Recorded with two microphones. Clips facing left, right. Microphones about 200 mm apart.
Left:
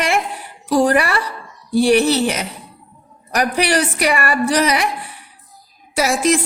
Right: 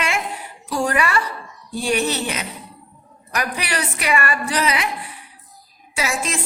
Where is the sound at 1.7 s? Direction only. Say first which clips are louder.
Left 8 dB; 85° left.